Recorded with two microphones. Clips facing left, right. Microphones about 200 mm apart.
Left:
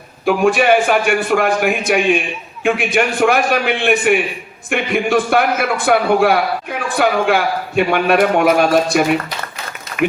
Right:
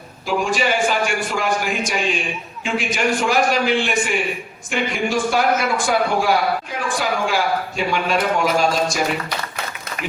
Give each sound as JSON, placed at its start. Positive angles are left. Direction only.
{"t": 0.3, "sound": "a man's voice", "side_deg": 60}